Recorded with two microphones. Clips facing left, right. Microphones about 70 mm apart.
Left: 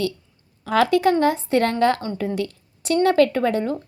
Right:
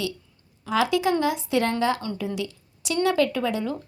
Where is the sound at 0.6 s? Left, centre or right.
Left.